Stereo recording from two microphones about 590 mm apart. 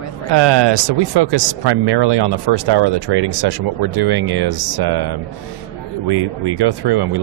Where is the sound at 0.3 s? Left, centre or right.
Right.